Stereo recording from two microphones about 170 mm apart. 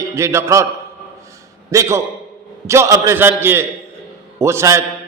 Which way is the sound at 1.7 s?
15° right (ahead or behind).